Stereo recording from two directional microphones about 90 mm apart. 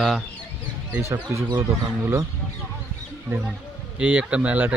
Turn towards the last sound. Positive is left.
turn(degrees=-15)  # may be behind; listen again after turning